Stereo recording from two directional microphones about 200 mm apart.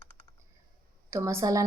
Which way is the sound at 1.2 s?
15° right (ahead or behind).